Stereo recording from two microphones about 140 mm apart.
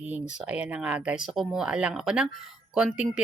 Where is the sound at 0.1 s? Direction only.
10° right (ahead or behind).